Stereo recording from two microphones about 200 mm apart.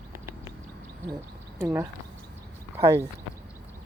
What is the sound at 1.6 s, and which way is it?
Speech, 15° right (ahead or behind).